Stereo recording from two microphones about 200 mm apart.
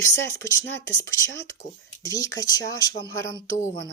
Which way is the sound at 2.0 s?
15° left (ahead or behind).